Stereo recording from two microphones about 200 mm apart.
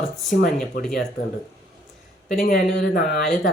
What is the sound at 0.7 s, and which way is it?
Speech, 50° left (ahead or behind).